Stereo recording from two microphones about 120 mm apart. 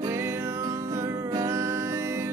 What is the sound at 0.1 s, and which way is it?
Music, 20° right (ahead or behind).